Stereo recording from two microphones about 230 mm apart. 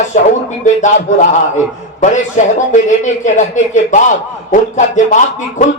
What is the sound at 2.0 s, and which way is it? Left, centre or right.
A man's voice, left.